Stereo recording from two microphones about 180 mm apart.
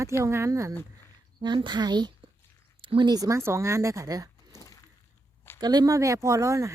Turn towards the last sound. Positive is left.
turn(degrees=-15)  # may be behind; listen again after turning